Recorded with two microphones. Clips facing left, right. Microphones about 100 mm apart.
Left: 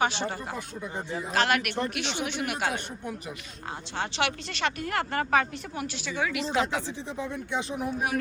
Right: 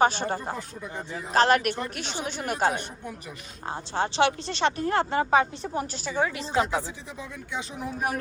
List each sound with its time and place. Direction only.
0.0 s speech: 45° right (ahead or behind)
6.6 s speech: 20° right (ahead or behind)
6.8 s speech: 20° left (ahead or behind)